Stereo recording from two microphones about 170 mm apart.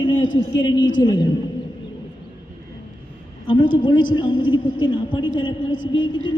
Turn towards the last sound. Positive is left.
turn(degrees=30)  # may be behind; listen again after turning